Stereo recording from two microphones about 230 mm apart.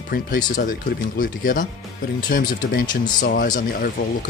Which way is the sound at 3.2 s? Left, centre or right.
Left.